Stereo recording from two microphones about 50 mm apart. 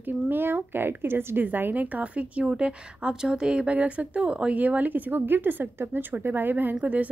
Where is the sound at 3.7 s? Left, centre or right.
Right.